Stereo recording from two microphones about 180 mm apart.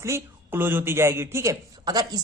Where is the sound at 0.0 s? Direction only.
15° right (ahead or behind).